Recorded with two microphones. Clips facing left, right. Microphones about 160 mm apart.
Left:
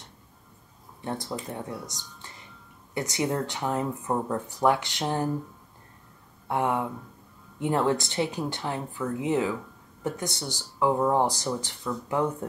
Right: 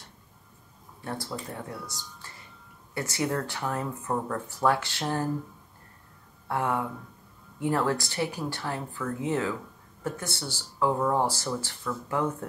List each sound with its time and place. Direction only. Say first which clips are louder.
1.0 s speech: left 2 dB; 20° left (ahead or behind)
6.4 s speech: left 2 dB; 20° left (ahead or behind)